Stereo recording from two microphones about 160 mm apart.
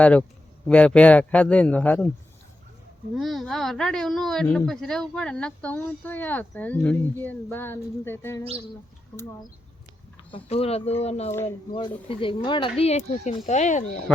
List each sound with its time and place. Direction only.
0.0 s a child's voice: 10° left (ahead or behind)
3.2 s a child's voice: centre (ahead or behind); by 8.4 s 15° left (ahead or behind)
10.3 s speech: 40° left (ahead or behind)